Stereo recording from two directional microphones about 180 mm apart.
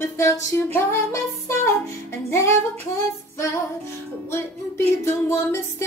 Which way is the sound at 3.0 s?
15° left (ahead or behind).